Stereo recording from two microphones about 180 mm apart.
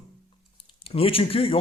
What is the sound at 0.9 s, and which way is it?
Speech, 30° left (ahead or behind).